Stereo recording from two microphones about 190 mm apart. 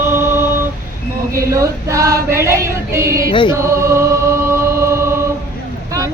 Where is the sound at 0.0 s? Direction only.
10° right (ahead or behind).